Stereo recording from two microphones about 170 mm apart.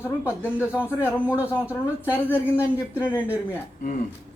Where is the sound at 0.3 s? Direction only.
10° right (ahead or behind).